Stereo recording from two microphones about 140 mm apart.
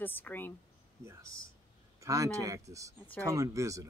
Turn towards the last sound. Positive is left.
turn(degrees=-25)  # may be behind; listen again after turning